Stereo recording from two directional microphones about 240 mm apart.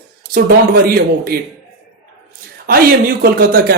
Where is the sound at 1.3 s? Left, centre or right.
Right.